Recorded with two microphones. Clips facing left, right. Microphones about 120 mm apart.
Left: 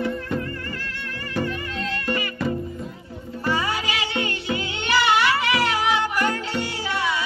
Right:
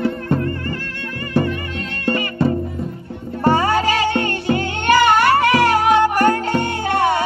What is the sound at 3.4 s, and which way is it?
Music, 45° right (ahead or behind).